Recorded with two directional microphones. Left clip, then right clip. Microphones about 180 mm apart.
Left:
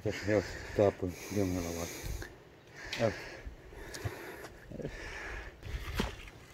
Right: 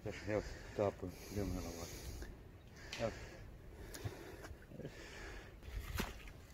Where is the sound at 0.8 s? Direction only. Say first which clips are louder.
Left 10 dB; 65° left (ahead or behind).